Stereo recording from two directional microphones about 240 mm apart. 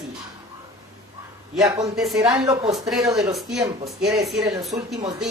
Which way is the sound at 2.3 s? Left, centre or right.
Centre.